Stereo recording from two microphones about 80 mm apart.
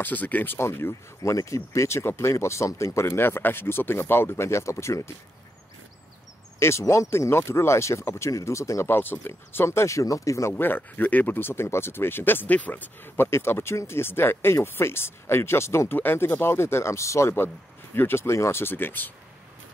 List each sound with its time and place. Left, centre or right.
0.0 s speech: left
0.6 s speech: left
6.6 s speech: left
10.5 s speech: left